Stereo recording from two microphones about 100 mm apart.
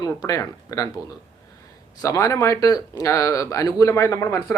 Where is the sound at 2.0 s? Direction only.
30° left (ahead or behind).